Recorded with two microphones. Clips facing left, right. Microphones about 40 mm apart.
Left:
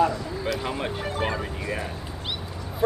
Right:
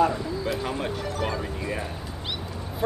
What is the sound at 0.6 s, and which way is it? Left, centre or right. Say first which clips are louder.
Speech: even; centre.